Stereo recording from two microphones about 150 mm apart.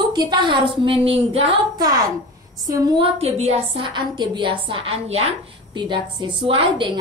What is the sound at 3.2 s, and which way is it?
A woman's voice, 40° right (ahead or behind).